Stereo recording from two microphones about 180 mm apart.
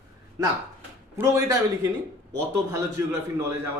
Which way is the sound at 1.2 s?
15° right (ahead or behind).